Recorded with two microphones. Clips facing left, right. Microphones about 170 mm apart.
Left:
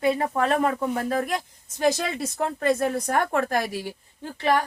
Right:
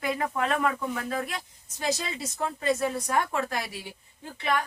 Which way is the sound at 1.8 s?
55° left (ahead or behind).